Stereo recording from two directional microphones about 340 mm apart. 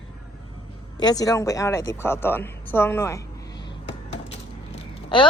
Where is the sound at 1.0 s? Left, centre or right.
Centre.